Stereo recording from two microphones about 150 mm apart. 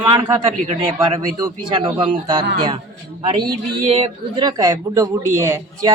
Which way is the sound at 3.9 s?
35° right (ahead or behind).